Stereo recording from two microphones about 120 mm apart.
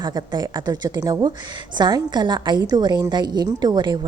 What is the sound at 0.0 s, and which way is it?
A woman's voice, 35° right (ahead or behind).